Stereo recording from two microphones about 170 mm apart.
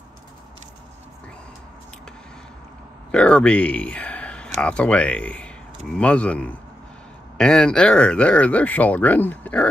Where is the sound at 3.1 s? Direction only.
5° left (ahead or behind).